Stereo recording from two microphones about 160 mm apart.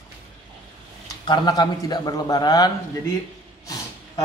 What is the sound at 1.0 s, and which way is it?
A man's voice, 25° left (ahead or behind).